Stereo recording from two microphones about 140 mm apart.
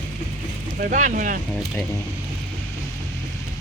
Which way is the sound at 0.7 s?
70° right (ahead or behind).